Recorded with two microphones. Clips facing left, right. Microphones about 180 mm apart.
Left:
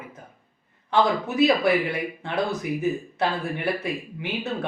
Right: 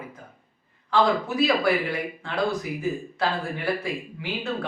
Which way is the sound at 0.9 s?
20° left (ahead or behind).